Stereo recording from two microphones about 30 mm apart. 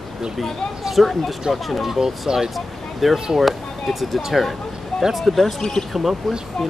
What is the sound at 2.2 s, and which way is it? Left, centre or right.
Speech, right.